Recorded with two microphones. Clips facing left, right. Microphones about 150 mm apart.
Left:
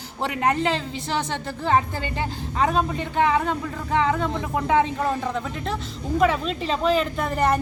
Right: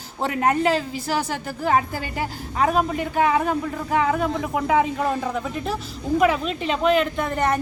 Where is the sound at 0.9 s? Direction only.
25° left (ahead or behind).